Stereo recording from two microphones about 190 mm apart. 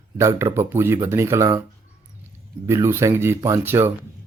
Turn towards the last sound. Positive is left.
turn(degrees=-10)  # may be behind; listen again after turning